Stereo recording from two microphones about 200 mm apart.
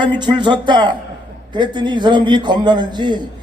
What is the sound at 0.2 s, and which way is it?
A man's voice, 20° right (ahead or behind).